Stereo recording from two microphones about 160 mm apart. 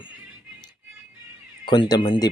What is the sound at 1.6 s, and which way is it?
Speech, 30° left (ahead or behind).